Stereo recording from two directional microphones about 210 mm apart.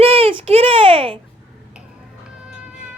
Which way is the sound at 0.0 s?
25° right (ahead or behind).